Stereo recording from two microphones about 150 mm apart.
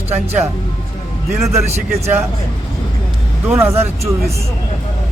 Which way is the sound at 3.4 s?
20° right (ahead or behind).